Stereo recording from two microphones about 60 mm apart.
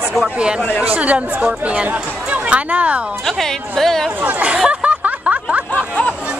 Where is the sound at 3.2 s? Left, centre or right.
Centre.